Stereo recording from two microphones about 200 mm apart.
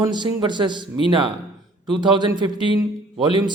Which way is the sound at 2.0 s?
25° right (ahead or behind).